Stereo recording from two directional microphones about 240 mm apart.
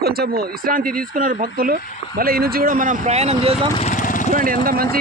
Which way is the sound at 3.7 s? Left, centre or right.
Left.